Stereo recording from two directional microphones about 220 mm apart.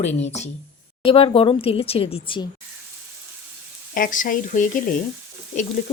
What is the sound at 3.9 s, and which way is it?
Speech, 35° left (ahead or behind).